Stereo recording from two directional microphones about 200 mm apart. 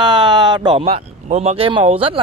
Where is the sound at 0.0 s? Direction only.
25° right (ahead or behind).